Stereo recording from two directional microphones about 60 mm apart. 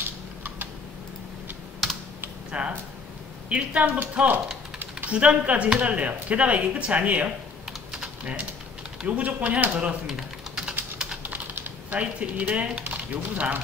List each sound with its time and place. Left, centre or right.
2.5 s speech: centre
10.0 s typing: centre
11.2 s speech: right